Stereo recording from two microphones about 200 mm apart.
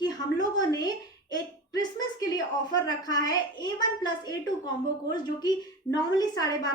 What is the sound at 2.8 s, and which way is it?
A woman's voice, 20° left (ahead or behind).